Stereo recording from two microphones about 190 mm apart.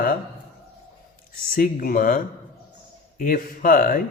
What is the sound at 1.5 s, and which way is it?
Speech, 45° left (ahead or behind).